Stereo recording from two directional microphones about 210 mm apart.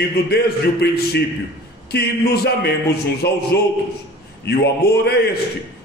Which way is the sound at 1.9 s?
50° left (ahead or behind).